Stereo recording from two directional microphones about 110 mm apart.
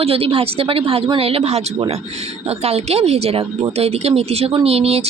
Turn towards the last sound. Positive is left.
turn(degrees=-65)  # may be behind; listen again after turning